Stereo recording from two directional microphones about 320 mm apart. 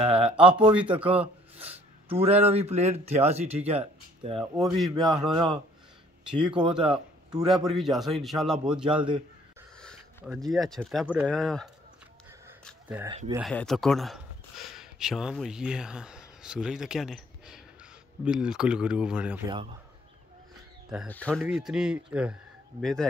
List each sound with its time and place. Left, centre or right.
0.0 s speech: centre
1.6 s a sound: centre
2.2 s speech: centre
4.6 s speech: centre
5.3 s speech: centre
6.8 s speech: centre
7.4 s speech: centre
8.8 s speech: centre
9.8 s speech: centre
12.9 s speech: centre
13.3 s speech: centre
20.9 s speech: centre